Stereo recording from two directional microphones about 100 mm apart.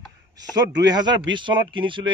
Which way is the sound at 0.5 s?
40° right (ahead or behind).